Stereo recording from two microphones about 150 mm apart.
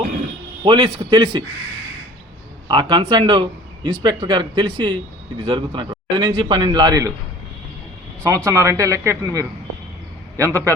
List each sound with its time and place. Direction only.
0.6 s a man's voice: 30° right (ahead or behind)
2.6 s a man's voice: 30° right (ahead or behind)
8.4 s a man's voice: 20° right (ahead or behind)